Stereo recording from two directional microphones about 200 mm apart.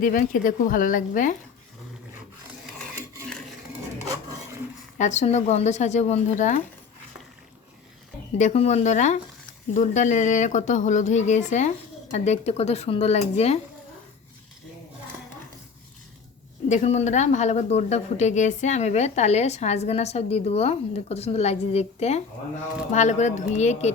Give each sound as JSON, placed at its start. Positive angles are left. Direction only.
{"t": 0.0, "sound": "speech", "side_deg": 40}
{"t": 4.9, "sound": "speech", "side_deg": 35}
{"t": 8.4, "sound": "speech", "side_deg": 35}
{"t": 16.6, "sound": "speech", "side_deg": 35}